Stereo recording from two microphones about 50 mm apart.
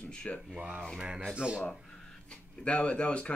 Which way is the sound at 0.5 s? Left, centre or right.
Right.